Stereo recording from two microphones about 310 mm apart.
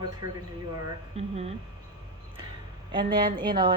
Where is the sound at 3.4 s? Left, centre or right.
Centre.